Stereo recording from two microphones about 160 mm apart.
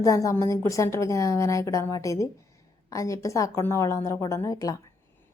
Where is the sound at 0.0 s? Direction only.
20° left (ahead or behind).